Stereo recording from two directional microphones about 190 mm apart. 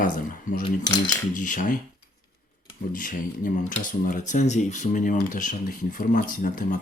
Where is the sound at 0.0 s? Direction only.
45° left (ahead or behind).